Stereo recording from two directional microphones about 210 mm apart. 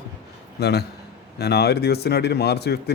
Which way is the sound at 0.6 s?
50° left (ahead or behind).